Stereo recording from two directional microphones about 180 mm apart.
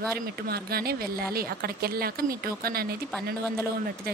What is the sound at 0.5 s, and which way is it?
A woman's voice, 60° right (ahead or behind).